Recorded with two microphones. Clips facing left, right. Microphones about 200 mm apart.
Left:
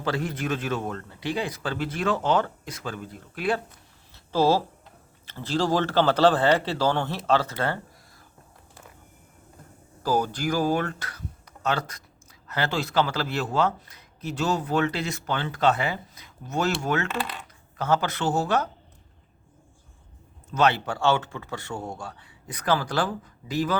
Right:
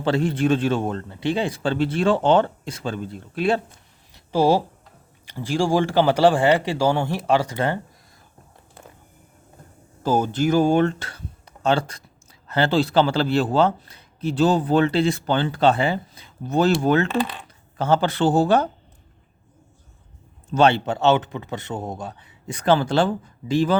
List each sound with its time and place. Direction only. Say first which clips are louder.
0.0 s speech: right 8 dB; 30° right (ahead or behind)
4.1 s a sound: right 3 dB; 15° right (ahead or behind)
5.2 s a man's voice: right 3 dB; 10° right (ahead or behind)
10.0 s speech: right 5 dB; 25° right (ahead or behind)
20.5 s speech: right 5 dB; 30° right (ahead or behind)